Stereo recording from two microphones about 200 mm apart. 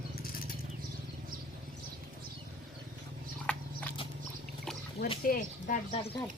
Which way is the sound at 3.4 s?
5° left (ahead or behind).